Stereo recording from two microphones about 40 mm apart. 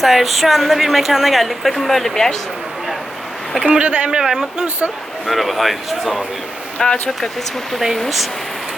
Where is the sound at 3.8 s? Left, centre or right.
Right.